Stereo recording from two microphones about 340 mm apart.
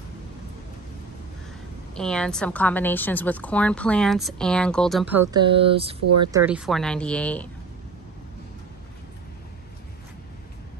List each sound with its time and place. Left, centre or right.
2.0 s a woman's voice: centre
6.0 s speech: right
6.3 s a woman's voice: centre